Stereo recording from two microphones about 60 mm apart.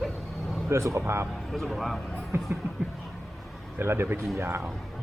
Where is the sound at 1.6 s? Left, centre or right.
Centre.